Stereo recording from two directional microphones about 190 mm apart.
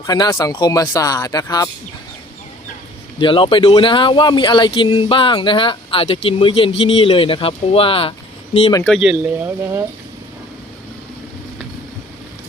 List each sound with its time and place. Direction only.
0.0 s speech: 20° left (ahead or behind)
3.2 s speech: 25° left (ahead or behind)
8.9 s speech: 5° right (ahead or behind)